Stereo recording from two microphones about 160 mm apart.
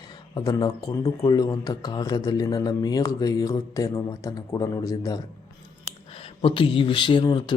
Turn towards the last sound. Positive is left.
turn(degrees=30)  # may be behind; listen again after turning